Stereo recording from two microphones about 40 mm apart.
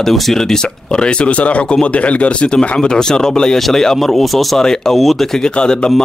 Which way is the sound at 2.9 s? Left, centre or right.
Centre.